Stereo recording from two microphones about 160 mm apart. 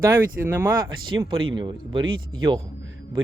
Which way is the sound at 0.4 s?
15° right (ahead or behind).